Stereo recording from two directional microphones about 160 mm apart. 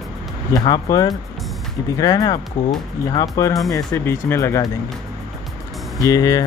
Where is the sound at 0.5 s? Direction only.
25° left (ahead or behind).